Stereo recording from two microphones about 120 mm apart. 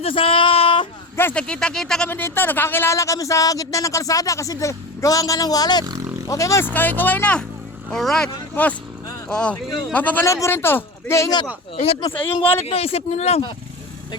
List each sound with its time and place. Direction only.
0.0 s a sound: 50° left (ahead or behind)
1.1 s speech: 20° left (ahead or behind)
1.4 s speech: 5° left (ahead or behind)
2.0 s speech: 20° left (ahead or behind)
6.7 s speech: 15° left (ahead or behind)
10.2 s speech: 25° left (ahead or behind)
12.6 s speech: 55° left (ahead or behind)